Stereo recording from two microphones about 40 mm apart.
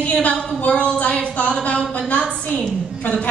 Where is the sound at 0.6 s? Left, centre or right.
Left.